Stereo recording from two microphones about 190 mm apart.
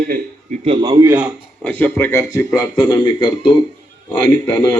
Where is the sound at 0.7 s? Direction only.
20° right (ahead or behind).